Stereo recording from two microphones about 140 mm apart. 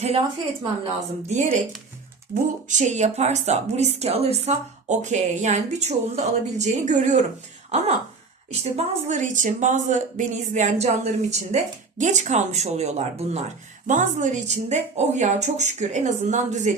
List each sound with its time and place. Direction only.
1.3 s speech: 60° right (ahead or behind)
13.8 s speech: 65° right (ahead or behind)